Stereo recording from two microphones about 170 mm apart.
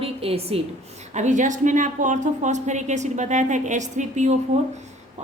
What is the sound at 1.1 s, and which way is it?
A woman's voice, 45° right (ahead or behind).